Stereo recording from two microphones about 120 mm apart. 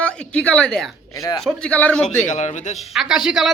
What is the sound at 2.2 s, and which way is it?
Speech, 75° left (ahead or behind).